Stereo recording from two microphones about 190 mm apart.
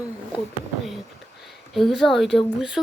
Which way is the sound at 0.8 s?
Centre (ahead or behind).